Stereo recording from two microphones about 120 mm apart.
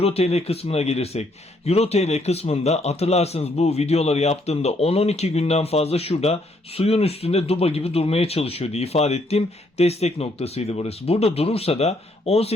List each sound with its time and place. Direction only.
0.0 s speech: 55° left (ahead or behind)